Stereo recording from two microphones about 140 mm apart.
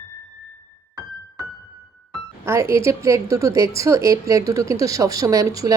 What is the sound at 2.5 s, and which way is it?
A woman's voice, 20° right (ahead or behind).